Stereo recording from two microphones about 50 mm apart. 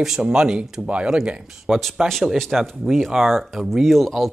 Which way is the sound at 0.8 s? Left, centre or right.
Right.